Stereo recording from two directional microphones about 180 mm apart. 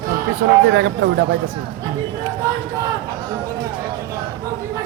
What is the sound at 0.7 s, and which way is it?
Speech, 70° right (ahead or behind).